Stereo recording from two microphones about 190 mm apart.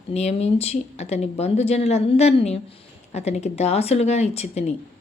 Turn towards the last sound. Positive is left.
turn(degrees=35)  # may be behind; listen again after turning